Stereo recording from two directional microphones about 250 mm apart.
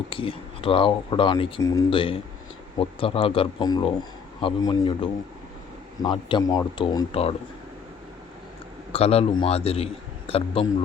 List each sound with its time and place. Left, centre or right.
0.1 s a man's voice: left
6.0 s speech: centre
8.9 s speech: left